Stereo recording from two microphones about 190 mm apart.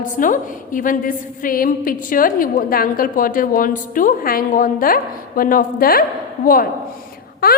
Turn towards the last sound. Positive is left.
turn(degrees=55)  # may be behind; listen again after turning